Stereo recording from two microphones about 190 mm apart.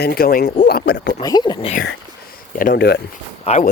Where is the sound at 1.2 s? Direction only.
20° left (ahead or behind).